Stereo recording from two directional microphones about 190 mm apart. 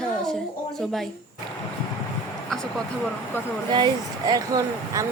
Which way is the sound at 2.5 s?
Centre (ahead or behind).